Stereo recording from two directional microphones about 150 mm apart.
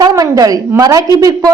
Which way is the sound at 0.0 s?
25° right (ahead or behind).